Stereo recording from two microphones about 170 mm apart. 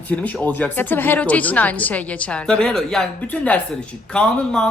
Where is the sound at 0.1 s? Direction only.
10° left (ahead or behind).